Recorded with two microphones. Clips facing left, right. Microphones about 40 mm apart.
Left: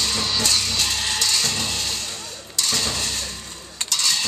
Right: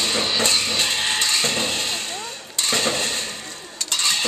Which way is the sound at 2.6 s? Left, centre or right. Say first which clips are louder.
Right 3 dB; right.